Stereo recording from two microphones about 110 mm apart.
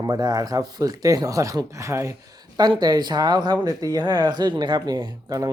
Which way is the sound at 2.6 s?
40° right (ahead or behind).